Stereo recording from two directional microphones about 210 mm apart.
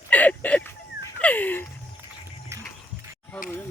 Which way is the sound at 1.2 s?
5° left (ahead or behind).